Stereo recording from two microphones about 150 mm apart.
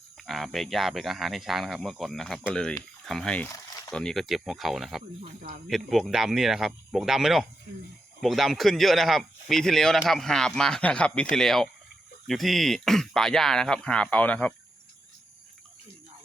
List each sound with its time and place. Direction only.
0.3 s a man's voice: centre (ahead or behind)
3.5 s a sound: 20° left (ahead or behind)
3.9 s a man's voice: centre (ahead or behind)